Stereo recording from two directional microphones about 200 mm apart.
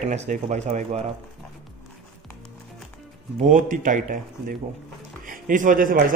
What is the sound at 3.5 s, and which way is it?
A man's voice, 40° right (ahead or behind).